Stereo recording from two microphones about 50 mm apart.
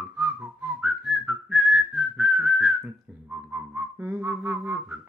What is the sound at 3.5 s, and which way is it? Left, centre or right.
Whistling, right.